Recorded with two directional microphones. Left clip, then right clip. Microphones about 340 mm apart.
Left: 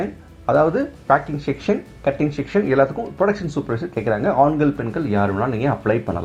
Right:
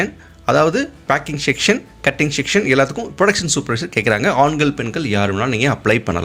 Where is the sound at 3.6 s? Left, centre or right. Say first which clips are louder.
Right 2 dB; right.